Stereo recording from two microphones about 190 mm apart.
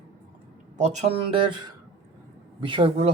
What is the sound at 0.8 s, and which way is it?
Speech, 35° right (ahead or behind).